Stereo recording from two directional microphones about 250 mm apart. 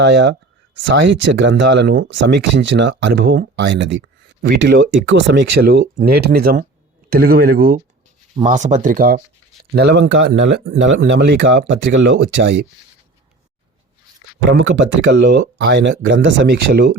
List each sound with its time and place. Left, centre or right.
0.0 s speech: right
9.9 s speech: right
14.5 s speech: right